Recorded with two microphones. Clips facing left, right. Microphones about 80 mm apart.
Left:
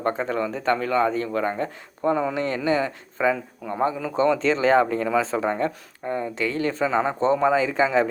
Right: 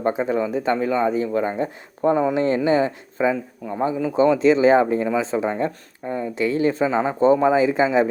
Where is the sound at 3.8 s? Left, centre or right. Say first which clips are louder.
Right 4 dB; centre.